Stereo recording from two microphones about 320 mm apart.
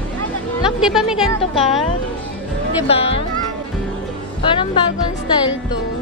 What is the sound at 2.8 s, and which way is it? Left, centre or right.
Speech, centre.